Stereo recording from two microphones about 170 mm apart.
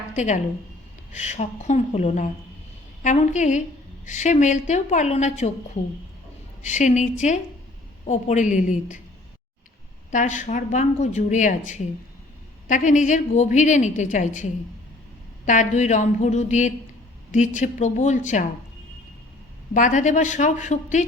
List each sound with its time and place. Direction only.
1.1 s a woman's voice: 45° left (ahead or behind)
10.1 s a woman's voice: 45° left (ahead or behind)
15.4 s a woman's voice: 45° left (ahead or behind)
19.7 s a woman's voice: 50° left (ahead or behind)